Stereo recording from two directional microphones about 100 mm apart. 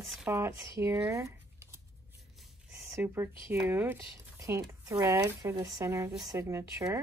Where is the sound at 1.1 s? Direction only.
30° right (ahead or behind).